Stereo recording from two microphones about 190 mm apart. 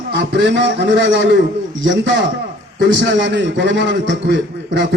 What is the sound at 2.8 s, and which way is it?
A man's voice, 70° right (ahead or behind).